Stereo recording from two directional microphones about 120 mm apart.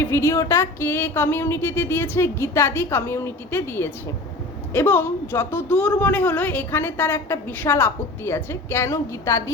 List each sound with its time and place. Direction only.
0.0 s a woman's voice: 20° left (ahead or behind)